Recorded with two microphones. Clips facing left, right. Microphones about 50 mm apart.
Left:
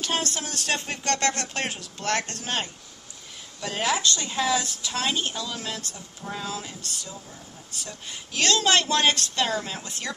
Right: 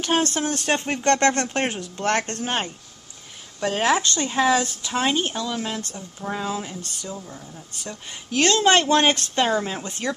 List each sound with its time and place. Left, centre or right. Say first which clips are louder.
0.0 s speech: right 6 dB; right